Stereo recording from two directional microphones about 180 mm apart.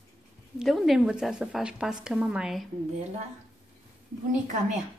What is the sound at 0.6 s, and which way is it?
A woman's voice, centre (ahead or behind).